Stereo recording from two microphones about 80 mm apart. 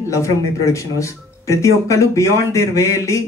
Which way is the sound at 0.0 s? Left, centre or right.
Left.